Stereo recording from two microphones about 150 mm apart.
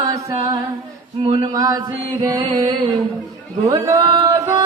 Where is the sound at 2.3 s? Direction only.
25° right (ahead or behind).